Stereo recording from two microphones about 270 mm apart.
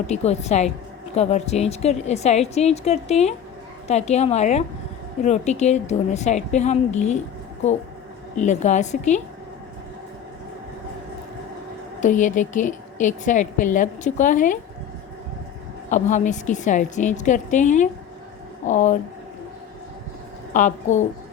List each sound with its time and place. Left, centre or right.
0.1 s a woman's voice: left
8.4 s a woman's voice: left
11.9 s a woman's voice: left
15.9 s a woman's voice: left
20.5 s a woman's voice: left